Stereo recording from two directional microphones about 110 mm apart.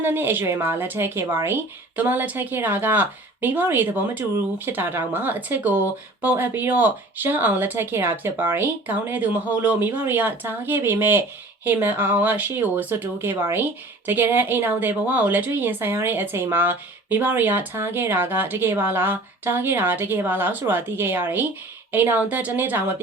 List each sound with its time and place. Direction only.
0.0 s speech: 20° right (ahead or behind)